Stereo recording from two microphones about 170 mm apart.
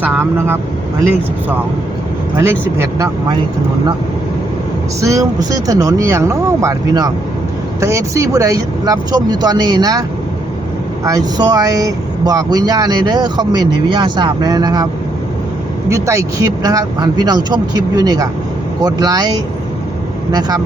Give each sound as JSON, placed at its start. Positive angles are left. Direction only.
{"t": 0.0, "sound": "speech", "side_deg": -10}
{"t": 2.4, "sound": "speech", "side_deg": -15}
{"t": 4.9, "sound": "speech", "side_deg": -20}
{"t": 11.0, "sound": "speech", "side_deg": -20}
{"t": 15.9, "sound": "speech", "side_deg": -15}